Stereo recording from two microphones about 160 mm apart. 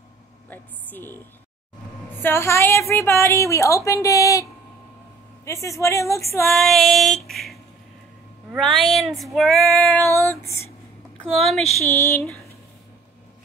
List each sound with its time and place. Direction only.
0.5 s a woman's voice: 10° left (ahead or behind)
2.2 s a woman's voice: 15° left (ahead or behind)
6.4 s female singing: centre (ahead or behind)
8.5 s female singing: centre (ahead or behind)
10.0 s female singing: 15° left (ahead or behind)
11.1 s a woman's voice: centre (ahead or behind)
11.8 s female singing: 15° left (ahead or behind)